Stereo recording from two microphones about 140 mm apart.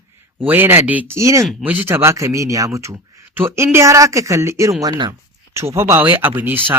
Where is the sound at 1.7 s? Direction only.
15° right (ahead or behind).